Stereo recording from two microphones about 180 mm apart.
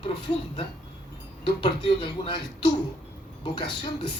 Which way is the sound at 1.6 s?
30° left (ahead or behind).